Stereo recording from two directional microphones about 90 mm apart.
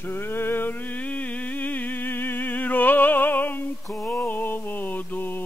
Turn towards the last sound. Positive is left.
turn(degrees=20)  # may be behind; listen again after turning